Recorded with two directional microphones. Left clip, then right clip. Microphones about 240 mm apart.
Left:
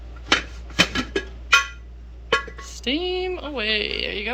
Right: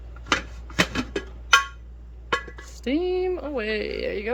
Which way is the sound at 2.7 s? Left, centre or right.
Right.